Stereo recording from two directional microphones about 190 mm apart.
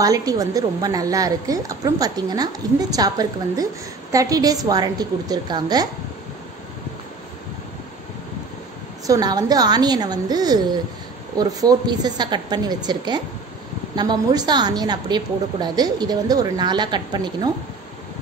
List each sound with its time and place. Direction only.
0.0 s a woman's voice: 20° right (ahead or behind)
9.0 s a woman's voice: 20° right (ahead or behind)